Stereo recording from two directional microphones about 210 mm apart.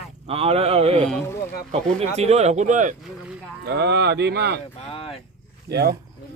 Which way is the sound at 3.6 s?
55° right (ahead or behind).